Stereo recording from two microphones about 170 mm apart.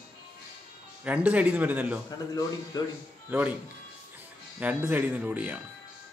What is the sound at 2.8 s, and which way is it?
Speech, 25° left (ahead or behind).